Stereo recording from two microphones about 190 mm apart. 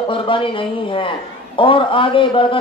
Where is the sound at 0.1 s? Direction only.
25° left (ahead or behind).